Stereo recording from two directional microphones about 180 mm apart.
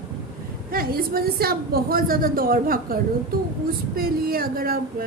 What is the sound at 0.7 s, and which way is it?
A woman's voice, 55° right (ahead or behind).